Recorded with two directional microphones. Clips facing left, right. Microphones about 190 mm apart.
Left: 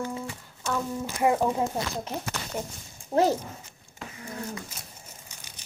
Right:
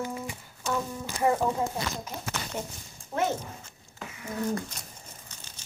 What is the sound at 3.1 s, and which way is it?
Speech, 30° left (ahead or behind).